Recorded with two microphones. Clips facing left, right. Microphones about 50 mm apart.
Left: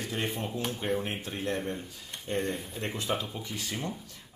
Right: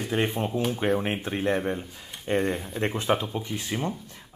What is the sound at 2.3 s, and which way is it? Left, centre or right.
Speech, right.